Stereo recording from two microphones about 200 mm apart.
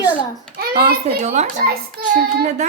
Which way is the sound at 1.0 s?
35° right (ahead or behind).